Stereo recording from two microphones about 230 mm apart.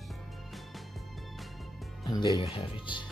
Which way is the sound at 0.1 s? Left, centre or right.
Centre.